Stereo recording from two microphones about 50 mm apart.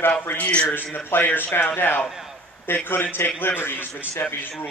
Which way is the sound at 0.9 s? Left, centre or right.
Left.